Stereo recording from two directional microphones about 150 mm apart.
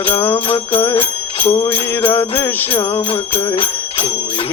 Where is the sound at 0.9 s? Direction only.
40° left (ahead or behind).